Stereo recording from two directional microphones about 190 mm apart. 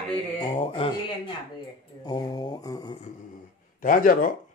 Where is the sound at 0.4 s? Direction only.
25° left (ahead or behind).